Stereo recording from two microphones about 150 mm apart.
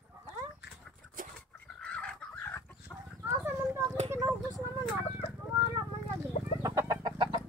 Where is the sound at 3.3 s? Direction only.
20° right (ahead or behind).